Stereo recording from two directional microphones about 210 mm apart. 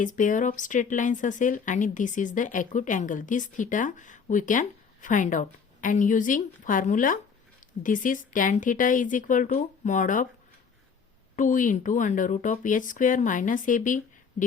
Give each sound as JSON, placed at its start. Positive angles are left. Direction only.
{"t": 0.0, "sound": "a woman's voice", "side_deg": 40}
{"t": 11.3, "sound": "a woman's voice", "side_deg": 40}